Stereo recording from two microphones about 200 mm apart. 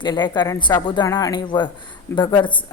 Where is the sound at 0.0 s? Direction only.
20° left (ahead or behind).